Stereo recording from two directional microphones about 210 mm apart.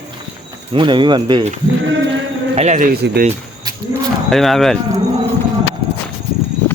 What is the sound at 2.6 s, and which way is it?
Speech, 35° right (ahead or behind).